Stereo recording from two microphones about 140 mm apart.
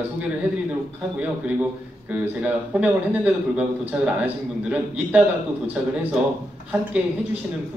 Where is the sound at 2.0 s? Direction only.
10° right (ahead or behind).